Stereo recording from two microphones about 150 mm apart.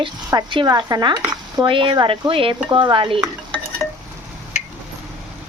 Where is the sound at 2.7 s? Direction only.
30° right (ahead or behind).